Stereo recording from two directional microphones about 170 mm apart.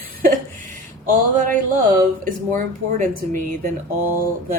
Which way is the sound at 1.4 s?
50° right (ahead or behind).